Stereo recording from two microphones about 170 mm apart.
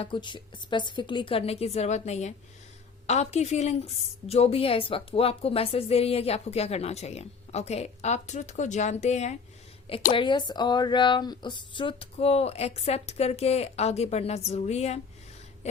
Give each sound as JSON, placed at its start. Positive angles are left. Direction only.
{"t": 0.0, "sound": "a woman's voice", "side_deg": 30}
{"t": 10.1, "sound": "a woman's voice", "side_deg": 30}